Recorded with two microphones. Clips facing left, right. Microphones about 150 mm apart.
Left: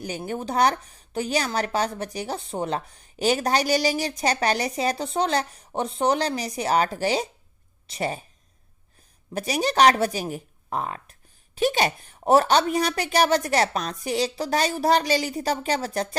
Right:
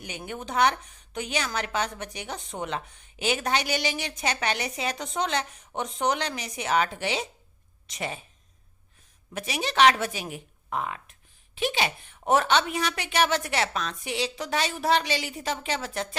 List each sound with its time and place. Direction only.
0.0 s speech: 35° left (ahead or behind)
9.3 s speech: 35° left (ahead or behind)